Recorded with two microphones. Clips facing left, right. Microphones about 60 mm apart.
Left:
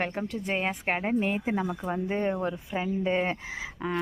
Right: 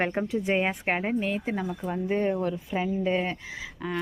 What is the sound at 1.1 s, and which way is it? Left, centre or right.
A woman's voice, centre.